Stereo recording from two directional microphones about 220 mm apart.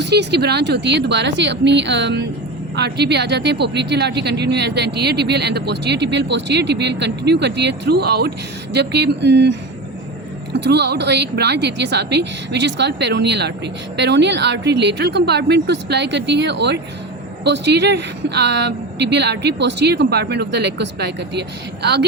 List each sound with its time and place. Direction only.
0.0 s a woman's voice: 50° right (ahead or behind)